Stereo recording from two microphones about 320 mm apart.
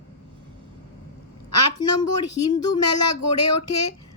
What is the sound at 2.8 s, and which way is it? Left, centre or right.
Speech, left.